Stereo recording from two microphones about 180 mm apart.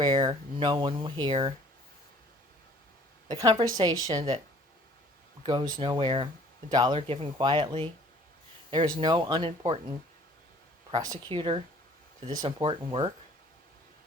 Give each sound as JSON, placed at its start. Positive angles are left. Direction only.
{"t": 0.0, "sound": "speech", "side_deg": -25}
{"t": 3.2, "sound": "speech", "side_deg": -20}
{"t": 5.8, "sound": "speech", "side_deg": -25}
{"t": 10.9, "sound": "speech", "side_deg": -30}